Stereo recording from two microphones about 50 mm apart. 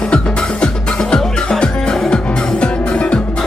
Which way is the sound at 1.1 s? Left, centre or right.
Centre.